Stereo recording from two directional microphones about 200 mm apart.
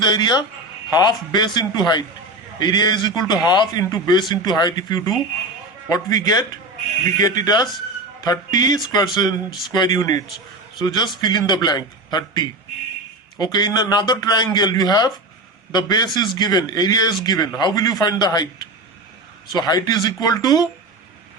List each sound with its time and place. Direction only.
0.0 s a man's voice: 20° left (ahead or behind)